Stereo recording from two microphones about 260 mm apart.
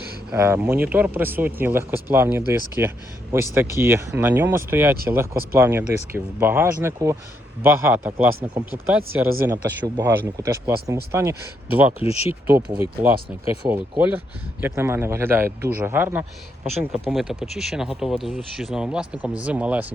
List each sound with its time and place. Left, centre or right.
0.3 s speech: centre
11.9 s speech: left
12.3 s speech: centre